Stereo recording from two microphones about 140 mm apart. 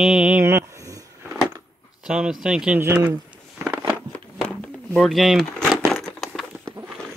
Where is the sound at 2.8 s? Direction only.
15° right (ahead or behind).